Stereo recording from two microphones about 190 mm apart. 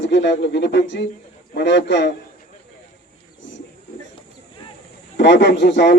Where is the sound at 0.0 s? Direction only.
70° left (ahead or behind).